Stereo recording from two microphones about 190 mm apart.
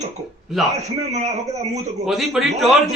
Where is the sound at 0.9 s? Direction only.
35° right (ahead or behind).